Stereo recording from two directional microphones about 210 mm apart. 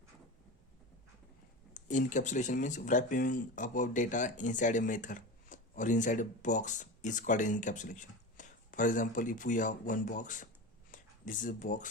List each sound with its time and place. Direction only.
1.7 s speech: 35° left (ahead or behind)